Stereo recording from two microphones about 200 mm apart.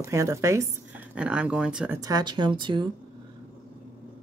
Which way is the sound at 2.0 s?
20° right (ahead or behind).